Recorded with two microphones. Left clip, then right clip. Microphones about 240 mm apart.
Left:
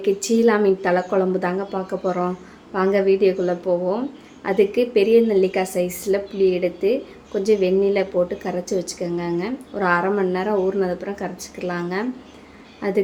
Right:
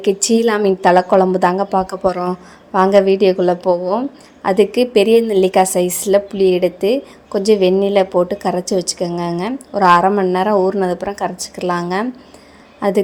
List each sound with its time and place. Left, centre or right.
0.0 s a woman's voice: right